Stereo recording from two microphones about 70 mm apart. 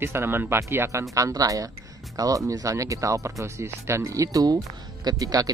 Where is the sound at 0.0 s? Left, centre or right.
Right.